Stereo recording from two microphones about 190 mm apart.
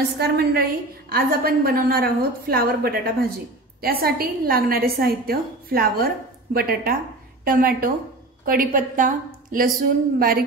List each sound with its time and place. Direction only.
0.2 s a woman's voice: 55° right (ahead or behind)